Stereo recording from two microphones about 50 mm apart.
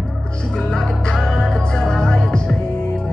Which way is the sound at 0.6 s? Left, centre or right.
Centre.